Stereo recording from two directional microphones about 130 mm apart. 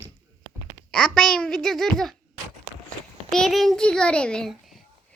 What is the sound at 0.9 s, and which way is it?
A child's voice, 5° left (ahead or behind).